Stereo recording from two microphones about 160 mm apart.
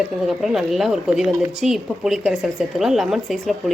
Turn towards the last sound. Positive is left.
turn(degrees=0)  # may be behind; listen again after turning